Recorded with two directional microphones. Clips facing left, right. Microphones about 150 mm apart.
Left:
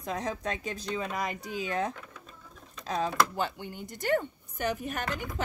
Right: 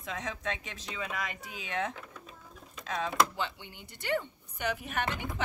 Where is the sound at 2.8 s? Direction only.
35° left (ahead or behind).